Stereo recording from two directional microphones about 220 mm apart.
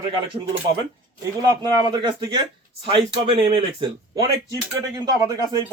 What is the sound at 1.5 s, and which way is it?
Speech, 20° right (ahead or behind).